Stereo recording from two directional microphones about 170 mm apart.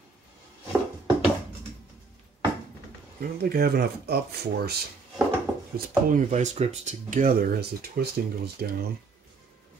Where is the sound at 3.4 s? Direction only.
65° right (ahead or behind).